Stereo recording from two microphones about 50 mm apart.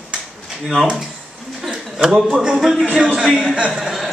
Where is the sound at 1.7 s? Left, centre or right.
Centre.